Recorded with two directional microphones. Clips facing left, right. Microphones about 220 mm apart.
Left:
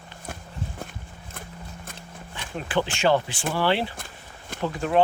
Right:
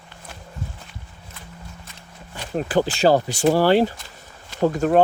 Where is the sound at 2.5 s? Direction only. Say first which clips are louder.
Right 6 dB; 40° right (ahead or behind).